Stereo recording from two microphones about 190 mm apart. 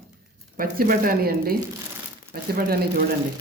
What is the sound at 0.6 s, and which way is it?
Speech, 50° right (ahead or behind).